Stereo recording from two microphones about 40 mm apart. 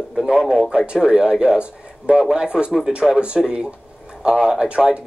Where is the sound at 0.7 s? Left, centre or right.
Centre.